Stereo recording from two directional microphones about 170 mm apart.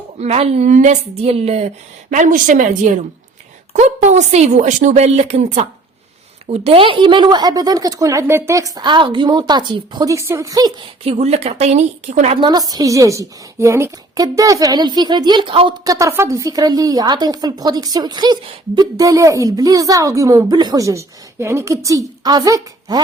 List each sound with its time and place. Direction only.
0.2 s a woman's voice: 35° right (ahead or behind); by 10.7 s 20° right (ahead or behind)
11.0 s speech: 40° right (ahead or behind)
12.4 s a woman's voice: 25° right (ahead or behind)